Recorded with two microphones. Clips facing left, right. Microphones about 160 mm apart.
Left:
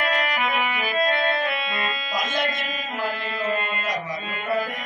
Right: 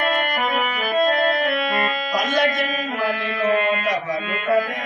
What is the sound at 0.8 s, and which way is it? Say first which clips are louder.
Organ: right 6 dB; 60° right (ahead or behind).